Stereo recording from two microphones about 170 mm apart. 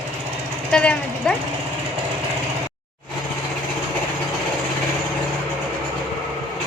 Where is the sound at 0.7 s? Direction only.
5° left (ahead or behind).